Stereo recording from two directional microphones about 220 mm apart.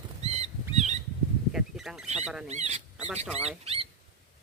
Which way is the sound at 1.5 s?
Centre (ahead or behind).